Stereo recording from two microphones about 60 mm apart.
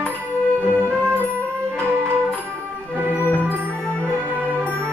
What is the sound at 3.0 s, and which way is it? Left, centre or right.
Music, right.